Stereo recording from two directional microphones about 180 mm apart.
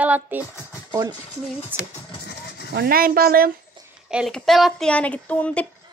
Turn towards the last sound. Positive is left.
turn(degrees=5)  # may be behind; listen again after turning